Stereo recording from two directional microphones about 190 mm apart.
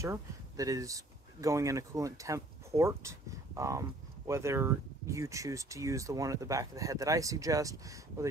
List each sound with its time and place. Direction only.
0.0 s speech: 15° right (ahead or behind)